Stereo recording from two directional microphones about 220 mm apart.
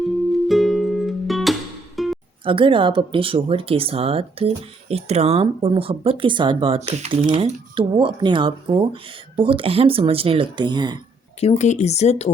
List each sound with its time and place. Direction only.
0.0 s music: centre (ahead or behind)
2.4 s speech: 25° right (ahead or behind)
11.3 s speech: 30° left (ahead or behind)